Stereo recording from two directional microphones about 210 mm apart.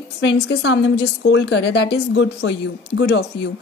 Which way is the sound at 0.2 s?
55° left (ahead or behind).